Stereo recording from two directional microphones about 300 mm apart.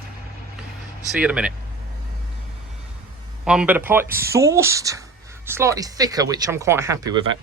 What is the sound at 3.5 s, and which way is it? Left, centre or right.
Speech, centre.